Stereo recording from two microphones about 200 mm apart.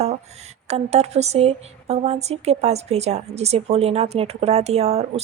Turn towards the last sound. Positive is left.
turn(degrees=-30)  # may be behind; listen again after turning